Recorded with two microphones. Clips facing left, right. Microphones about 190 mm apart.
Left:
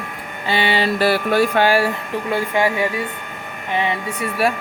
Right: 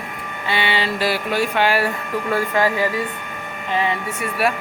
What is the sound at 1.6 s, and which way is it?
Speech, 35° left (ahead or behind).